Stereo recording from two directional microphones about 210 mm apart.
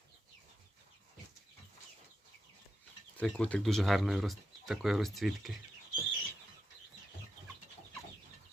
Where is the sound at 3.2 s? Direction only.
5° left (ahead or behind).